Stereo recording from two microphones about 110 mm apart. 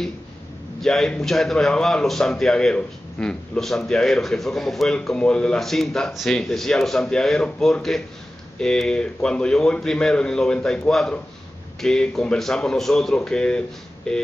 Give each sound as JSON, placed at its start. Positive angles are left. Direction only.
{"t": 0.7, "sound": "a man's voice", "side_deg": 5}